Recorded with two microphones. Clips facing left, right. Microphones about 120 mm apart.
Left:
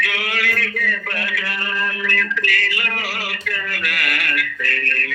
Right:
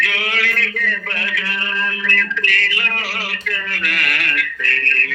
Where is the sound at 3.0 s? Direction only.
65° right (ahead or behind).